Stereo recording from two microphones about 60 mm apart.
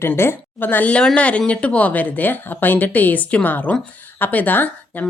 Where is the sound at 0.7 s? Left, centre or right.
Left.